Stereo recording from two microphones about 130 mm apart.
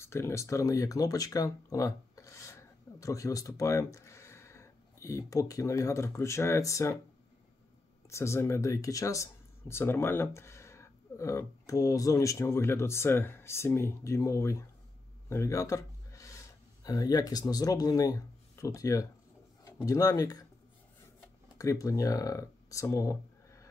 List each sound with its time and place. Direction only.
0.0 s speech: 20° left (ahead or behind)
8.1 s speech: 20° left (ahead or behind)
21.5 s speech: 25° left (ahead or behind)